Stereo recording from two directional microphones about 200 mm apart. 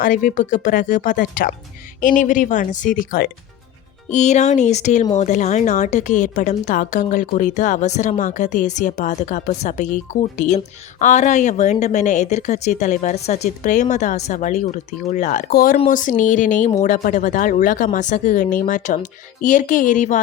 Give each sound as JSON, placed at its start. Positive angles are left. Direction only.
{"t": 0.0, "sound": "a woman's voice", "side_deg": 45}